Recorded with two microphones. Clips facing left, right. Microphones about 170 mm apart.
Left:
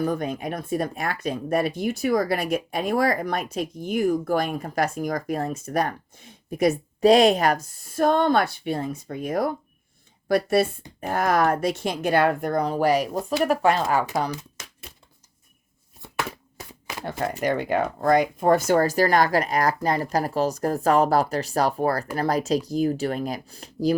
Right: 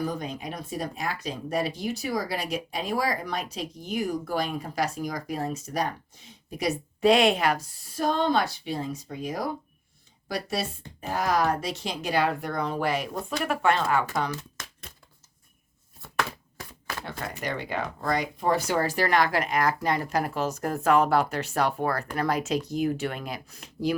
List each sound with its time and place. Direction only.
0.0 s speech: 55° left (ahead or behind); by 14.0 s 40° left (ahead or behind)
17.0 s speech: 45° left (ahead or behind)